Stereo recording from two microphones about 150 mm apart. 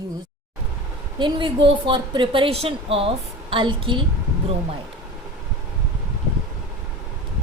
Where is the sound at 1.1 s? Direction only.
30° right (ahead or behind).